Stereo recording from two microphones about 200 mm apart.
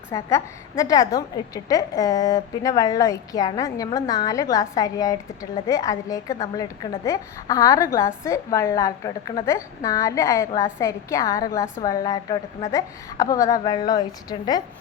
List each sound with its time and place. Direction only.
0.1 s a woman's voice: 15° left (ahead or behind)